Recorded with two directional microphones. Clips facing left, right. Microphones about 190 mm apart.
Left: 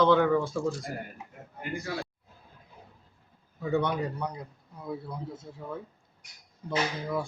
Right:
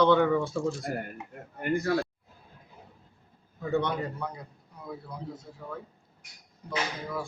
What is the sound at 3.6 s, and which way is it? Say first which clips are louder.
Speech: left 1 dB; 10° left (ahead or behind).